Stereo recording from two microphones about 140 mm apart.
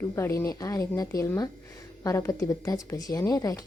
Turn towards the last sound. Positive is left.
turn(degrees=25)  # may be behind; listen again after turning